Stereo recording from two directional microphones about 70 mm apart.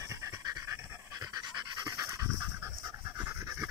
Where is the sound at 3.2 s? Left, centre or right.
Right.